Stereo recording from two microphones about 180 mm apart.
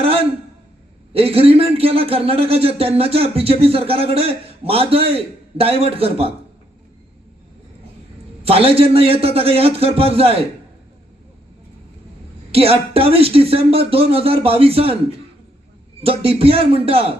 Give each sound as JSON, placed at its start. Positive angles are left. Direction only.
{"t": 0.0, "sound": "a sound", "side_deg": -30}
{"t": 1.1, "sound": "a man's voice", "side_deg": -35}
{"t": 8.4, "sound": "a man's voice", "side_deg": -30}
{"t": 12.5, "sound": "a man's voice", "side_deg": -35}
{"t": 16.0, "sound": "a man's voice", "side_deg": -30}